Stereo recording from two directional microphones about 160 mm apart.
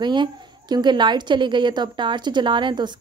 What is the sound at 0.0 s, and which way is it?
A woman's voice, 30° right (ahead or behind).